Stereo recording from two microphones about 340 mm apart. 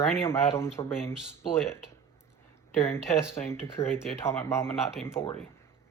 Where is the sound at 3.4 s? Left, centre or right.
Centre.